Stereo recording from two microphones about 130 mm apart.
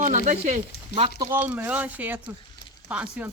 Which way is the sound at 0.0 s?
70° right (ahead or behind).